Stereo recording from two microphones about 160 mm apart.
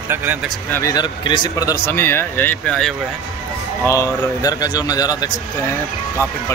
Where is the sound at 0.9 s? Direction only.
30° left (ahead or behind).